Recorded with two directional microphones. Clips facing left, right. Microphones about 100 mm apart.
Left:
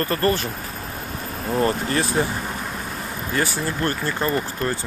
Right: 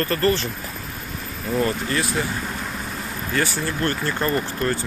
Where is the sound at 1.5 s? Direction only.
35° left (ahead or behind).